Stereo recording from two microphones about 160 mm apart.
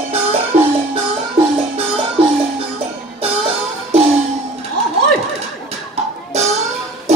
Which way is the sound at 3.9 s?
40° right (ahead or behind).